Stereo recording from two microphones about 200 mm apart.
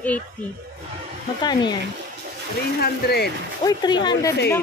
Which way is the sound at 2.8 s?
50° left (ahead or behind).